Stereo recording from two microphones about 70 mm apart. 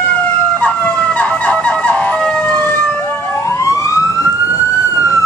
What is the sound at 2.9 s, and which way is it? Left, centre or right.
Emergency vehicle, left.